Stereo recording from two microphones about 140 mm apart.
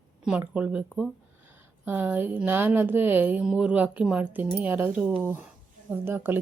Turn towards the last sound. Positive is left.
turn(degrees=-15)  # may be behind; listen again after turning